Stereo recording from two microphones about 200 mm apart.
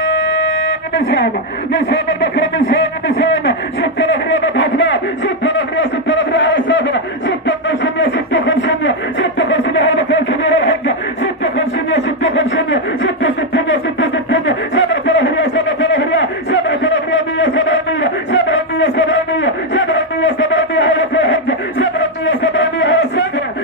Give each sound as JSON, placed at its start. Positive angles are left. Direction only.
{"t": 0.0, "sound": "music", "side_deg": 70}
{"t": 1.7, "sound": "speech", "side_deg": 65}
{"t": 3.8, "sound": "a sound", "side_deg": 70}